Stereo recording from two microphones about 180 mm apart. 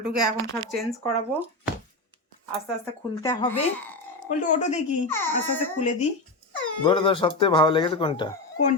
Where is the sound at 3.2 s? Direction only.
20° left (ahead or behind).